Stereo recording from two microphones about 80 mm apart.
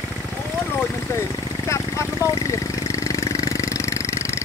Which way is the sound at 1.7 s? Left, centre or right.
Left.